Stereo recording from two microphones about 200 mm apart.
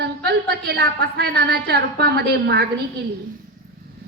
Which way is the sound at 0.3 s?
55° right (ahead or behind).